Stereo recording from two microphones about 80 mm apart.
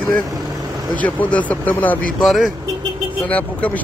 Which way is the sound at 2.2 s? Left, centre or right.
Centre.